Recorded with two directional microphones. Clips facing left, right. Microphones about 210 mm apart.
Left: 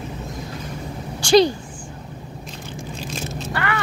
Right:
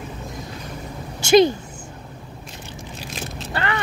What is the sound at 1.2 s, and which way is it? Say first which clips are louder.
Speech: right 1 dB; 20° right (ahead or behind).